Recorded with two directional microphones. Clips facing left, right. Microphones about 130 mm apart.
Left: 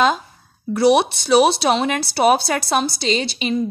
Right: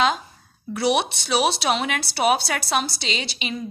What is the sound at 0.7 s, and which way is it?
Speech, 40° left (ahead or behind).